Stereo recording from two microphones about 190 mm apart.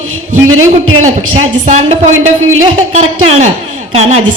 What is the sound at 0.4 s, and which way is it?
Speech, 90° right.